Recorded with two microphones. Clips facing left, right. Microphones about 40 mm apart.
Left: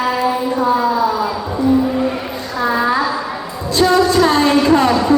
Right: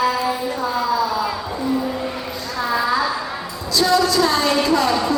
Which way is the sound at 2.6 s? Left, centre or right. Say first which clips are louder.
Left 4 dB; left.